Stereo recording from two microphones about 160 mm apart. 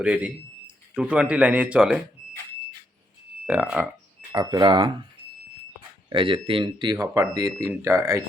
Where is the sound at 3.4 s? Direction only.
10° right (ahead or behind).